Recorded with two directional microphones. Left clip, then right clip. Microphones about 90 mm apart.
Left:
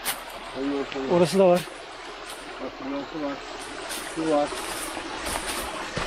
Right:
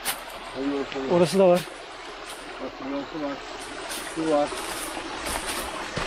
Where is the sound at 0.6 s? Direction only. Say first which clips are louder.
Even; 35° right (ahead or behind).